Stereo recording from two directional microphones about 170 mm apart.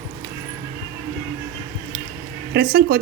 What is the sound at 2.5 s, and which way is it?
Speech, 70° right (ahead or behind).